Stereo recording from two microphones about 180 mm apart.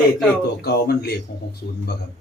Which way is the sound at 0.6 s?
60° left (ahead or behind).